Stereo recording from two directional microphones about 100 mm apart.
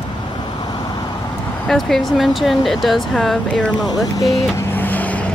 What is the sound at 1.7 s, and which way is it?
Speech, 5° left (ahead or behind).